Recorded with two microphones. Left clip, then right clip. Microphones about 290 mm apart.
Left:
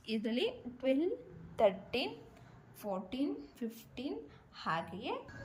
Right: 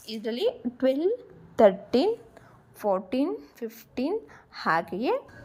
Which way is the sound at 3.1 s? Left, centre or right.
Centre.